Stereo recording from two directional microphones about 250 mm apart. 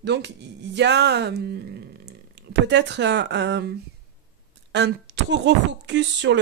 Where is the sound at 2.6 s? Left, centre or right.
Right.